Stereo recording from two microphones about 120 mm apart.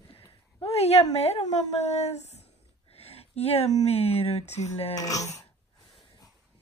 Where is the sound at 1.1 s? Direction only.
60° left (ahead or behind).